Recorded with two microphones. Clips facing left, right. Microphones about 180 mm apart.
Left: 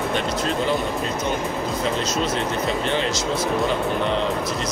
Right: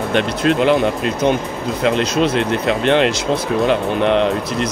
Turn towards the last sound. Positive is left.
turn(degrees=-70)  # may be behind; listen again after turning